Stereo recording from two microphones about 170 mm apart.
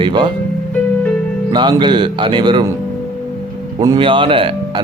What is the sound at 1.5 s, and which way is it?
Speech, 25° right (ahead or behind).